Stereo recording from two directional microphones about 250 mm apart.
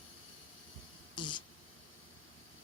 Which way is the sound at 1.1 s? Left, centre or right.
Centre.